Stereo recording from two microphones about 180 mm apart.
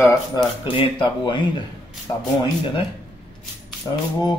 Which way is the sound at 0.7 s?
30° left (ahead or behind).